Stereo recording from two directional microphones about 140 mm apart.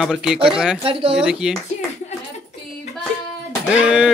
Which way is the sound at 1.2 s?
5° right (ahead or behind).